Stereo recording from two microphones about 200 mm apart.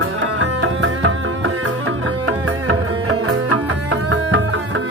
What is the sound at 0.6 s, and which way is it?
Music, 85° right.